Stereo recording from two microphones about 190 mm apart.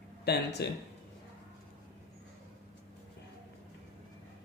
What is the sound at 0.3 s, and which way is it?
Speech, 60° left (ahead or behind).